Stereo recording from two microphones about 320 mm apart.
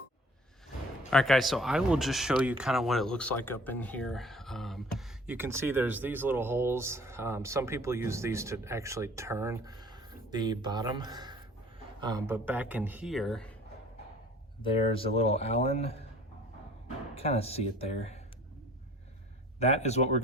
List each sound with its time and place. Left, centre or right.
1.1 s a man's voice: centre
14.6 s speech: centre
17.2 s speech: centre
19.5 s speech: centre